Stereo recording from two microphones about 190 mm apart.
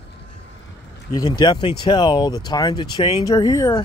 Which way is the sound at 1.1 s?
20° left (ahead or behind).